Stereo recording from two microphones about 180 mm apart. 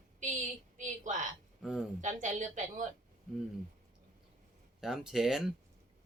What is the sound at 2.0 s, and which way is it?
Speech, 45° right (ahead or behind).